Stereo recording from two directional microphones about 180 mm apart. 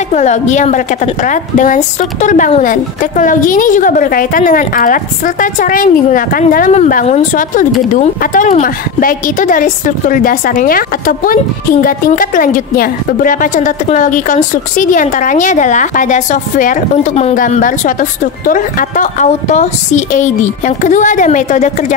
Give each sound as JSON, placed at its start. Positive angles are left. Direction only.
{"t": 0.1, "sound": "a woman's voice", "side_deg": 40}